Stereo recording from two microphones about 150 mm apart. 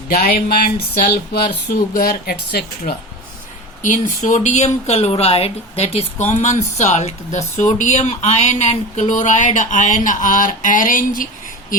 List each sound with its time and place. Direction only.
0.1 s speech: 90° left
3.8 s speech: 55° left (ahead or behind)